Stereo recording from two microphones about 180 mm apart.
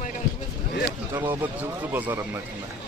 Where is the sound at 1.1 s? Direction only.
15° right (ahead or behind).